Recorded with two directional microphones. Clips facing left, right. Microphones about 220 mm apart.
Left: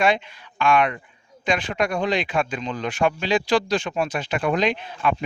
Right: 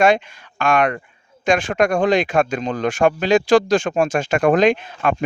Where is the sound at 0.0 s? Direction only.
45° right (ahead or behind).